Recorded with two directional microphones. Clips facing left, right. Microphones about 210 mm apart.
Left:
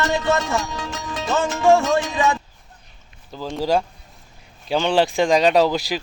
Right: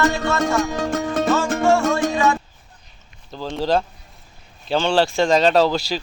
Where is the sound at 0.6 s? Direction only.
50° right (ahead or behind).